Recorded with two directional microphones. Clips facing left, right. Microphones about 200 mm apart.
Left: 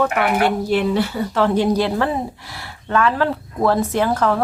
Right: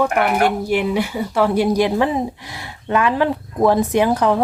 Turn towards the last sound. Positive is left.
turn(degrees=-15)  # may be behind; listen again after turning